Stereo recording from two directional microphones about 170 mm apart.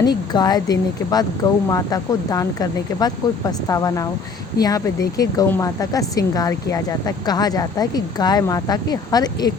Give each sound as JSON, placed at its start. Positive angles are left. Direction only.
{"t": 0.0, "sound": "speech", "side_deg": 25}